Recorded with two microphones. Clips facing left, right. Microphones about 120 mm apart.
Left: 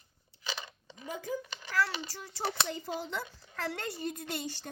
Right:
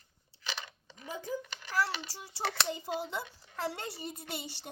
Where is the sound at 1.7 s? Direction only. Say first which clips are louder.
Left 1 dB; 15° right (ahead or behind).